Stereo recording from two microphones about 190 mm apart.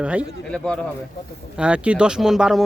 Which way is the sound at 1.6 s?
5° right (ahead or behind).